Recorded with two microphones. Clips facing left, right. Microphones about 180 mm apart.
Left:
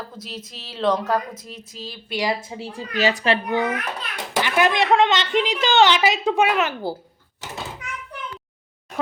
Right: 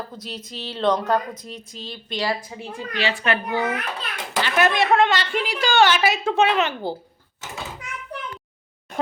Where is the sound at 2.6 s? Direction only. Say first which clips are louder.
Left 3 dB; 40° left (ahead or behind).